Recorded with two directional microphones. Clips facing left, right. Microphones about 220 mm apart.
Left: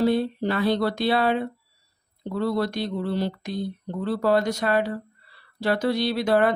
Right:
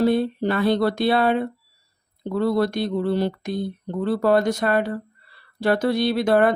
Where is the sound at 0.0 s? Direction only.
55° right (ahead or behind).